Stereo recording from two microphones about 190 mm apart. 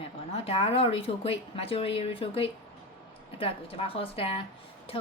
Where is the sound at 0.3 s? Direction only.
30° left (ahead or behind).